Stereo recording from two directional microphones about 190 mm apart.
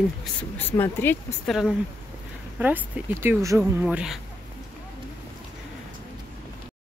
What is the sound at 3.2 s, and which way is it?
Speech, 15° right (ahead or behind).